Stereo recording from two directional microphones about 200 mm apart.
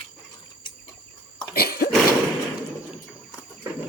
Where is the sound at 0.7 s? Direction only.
20° left (ahead or behind).